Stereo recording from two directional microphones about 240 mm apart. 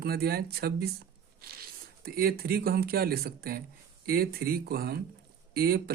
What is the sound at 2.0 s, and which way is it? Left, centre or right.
Speech, right.